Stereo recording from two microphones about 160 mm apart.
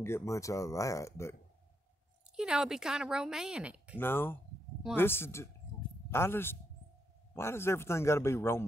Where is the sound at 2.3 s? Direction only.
5° right (ahead or behind).